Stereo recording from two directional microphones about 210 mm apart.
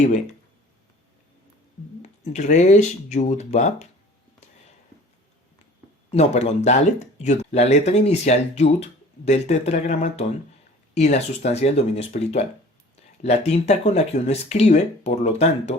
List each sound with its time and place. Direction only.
2.0 s speech: 35° left (ahead or behind)
6.1 s speech: 30° left (ahead or behind)